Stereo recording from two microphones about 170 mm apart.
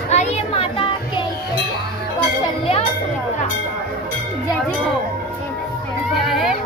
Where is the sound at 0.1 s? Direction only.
40° left (ahead or behind).